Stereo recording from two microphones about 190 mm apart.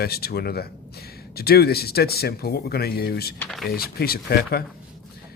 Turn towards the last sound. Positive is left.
turn(degrees=55)  # may be behind; listen again after turning